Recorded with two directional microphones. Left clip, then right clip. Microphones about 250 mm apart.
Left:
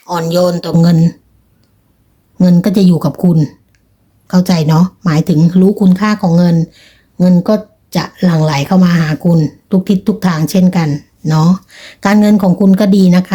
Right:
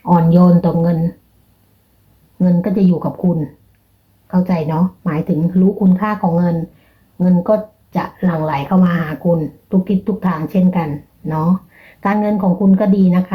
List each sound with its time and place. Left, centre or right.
0.1 s speech: left
2.4 s speech: left
4.3 s speech: left